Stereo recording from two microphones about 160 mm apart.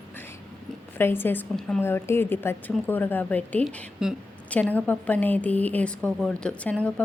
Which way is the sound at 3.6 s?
5° right (ahead or behind).